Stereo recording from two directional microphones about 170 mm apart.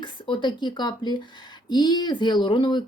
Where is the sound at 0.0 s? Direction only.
30° left (ahead or behind).